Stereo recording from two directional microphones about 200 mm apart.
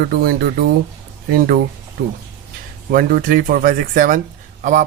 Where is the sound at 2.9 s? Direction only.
45° right (ahead or behind).